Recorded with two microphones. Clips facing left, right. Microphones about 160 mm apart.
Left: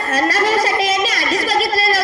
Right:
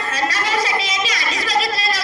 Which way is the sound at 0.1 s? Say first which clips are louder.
Left 6 dB; 45° left (ahead or behind).